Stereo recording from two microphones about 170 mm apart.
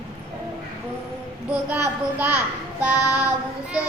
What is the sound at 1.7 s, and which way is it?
Female singing, 10° right (ahead or behind).